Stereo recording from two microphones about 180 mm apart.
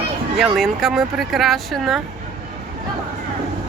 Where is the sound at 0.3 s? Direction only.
Centre (ahead or behind).